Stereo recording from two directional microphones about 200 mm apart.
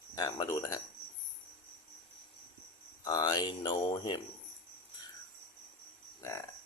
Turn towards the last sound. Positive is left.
turn(degrees=15)  # may be behind; listen again after turning